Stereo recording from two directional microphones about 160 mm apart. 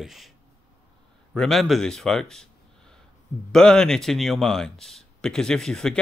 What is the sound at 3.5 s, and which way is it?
Speech, 5° left (ahead or behind).